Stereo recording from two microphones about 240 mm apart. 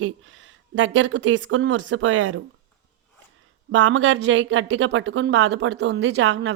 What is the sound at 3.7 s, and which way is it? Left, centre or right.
Speech, right.